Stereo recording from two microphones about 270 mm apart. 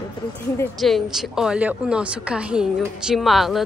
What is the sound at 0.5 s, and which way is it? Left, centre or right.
Speech, centre.